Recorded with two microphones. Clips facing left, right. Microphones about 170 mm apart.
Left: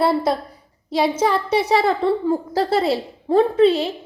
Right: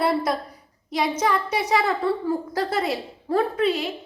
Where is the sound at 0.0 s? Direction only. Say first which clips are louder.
Left 4 dB; 30° left (ahead or behind).